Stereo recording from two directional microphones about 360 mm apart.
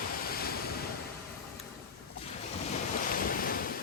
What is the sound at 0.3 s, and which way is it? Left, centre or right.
Waves, left.